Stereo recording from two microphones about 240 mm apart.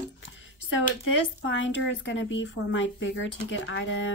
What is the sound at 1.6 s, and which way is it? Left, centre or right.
Speech, left.